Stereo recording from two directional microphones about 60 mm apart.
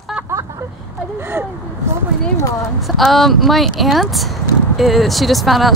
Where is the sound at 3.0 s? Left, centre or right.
Centre.